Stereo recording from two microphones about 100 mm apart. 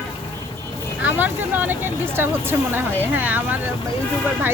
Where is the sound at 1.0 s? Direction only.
15° right (ahead or behind).